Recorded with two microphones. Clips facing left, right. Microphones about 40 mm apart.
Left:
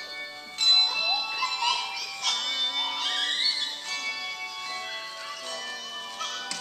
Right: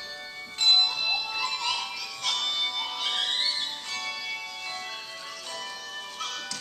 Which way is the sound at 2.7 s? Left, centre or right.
Left.